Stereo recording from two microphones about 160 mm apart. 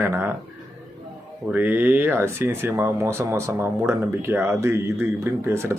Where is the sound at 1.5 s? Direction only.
10° right (ahead or behind).